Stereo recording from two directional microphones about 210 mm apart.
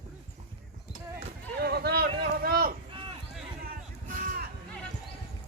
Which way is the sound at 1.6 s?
50° right (ahead or behind).